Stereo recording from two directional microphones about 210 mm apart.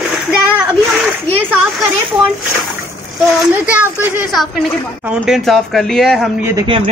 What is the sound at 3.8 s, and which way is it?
Speech, 10° right (ahead or behind).